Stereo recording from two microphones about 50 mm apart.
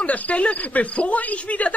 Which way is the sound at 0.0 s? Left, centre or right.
Left.